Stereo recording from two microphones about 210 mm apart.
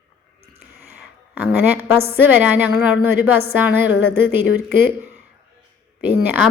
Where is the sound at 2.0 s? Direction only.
10° right (ahead or behind).